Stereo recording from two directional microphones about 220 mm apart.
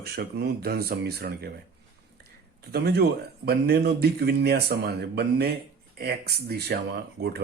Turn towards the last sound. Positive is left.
turn(degrees=-50)  # may be behind; listen again after turning